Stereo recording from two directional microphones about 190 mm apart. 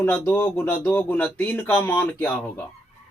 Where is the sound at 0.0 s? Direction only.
10° left (ahead or behind).